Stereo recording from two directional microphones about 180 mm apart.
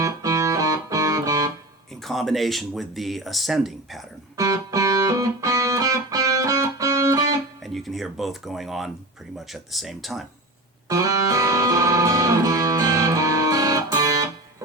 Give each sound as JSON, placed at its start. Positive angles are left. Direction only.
{"t": 0.0, "sound": "music", "side_deg": -20}
{"t": 2.0, "sound": "speech", "side_deg": 0}
{"t": 4.4, "sound": "music", "side_deg": -20}
{"t": 7.6, "sound": "speech", "side_deg": 0}
{"t": 10.8, "sound": "music", "side_deg": -20}